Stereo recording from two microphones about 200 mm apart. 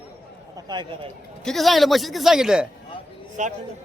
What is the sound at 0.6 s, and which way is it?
Speech, 20° right (ahead or behind).